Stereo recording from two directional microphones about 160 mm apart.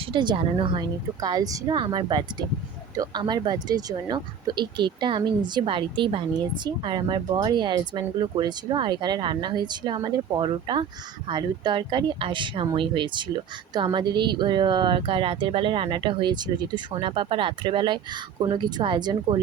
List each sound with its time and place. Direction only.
0.0 s speech: 30° right (ahead or behind)